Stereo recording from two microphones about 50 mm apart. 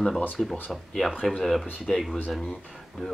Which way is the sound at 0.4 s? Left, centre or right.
Centre.